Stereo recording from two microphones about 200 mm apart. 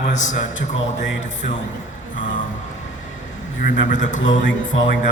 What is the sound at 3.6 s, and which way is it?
Speech, 40° left (ahead or behind).